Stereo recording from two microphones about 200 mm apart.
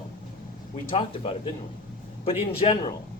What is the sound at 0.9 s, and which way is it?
Speech, 25° left (ahead or behind).